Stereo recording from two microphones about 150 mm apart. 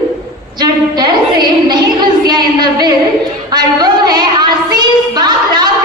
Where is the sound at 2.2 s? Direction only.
30° right (ahead or behind).